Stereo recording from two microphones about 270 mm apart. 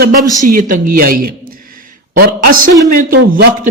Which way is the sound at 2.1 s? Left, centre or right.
Right.